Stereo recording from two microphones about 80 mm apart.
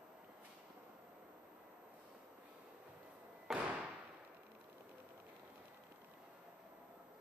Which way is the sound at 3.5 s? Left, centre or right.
Centre.